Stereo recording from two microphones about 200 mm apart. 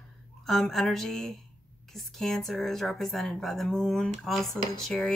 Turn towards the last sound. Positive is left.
turn(degrees=0)  # may be behind; listen again after turning